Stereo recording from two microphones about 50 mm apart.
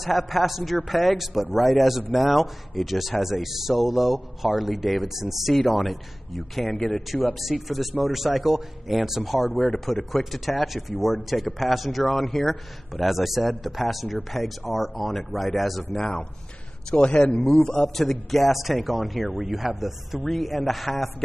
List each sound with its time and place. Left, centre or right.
0.0 s a man's voice: centre
7.3 s a man's voice: centre
16.9 s a man's voice: left
17.8 s a man's voice: centre